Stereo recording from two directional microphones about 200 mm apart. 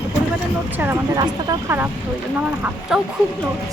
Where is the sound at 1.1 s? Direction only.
20° right (ahead or behind); by 3.0 s 5° right (ahead or behind).